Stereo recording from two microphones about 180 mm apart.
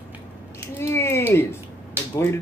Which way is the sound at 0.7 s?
15° left (ahead or behind).